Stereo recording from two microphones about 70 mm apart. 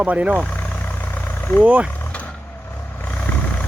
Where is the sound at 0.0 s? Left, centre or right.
Centre.